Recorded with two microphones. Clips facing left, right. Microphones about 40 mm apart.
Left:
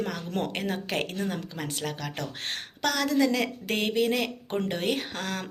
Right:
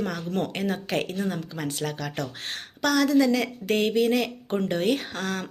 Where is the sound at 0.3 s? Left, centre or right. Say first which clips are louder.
Right 2 dB; left.